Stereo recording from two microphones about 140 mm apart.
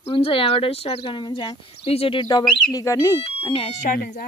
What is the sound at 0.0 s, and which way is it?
Speech, 40° left (ahead or behind).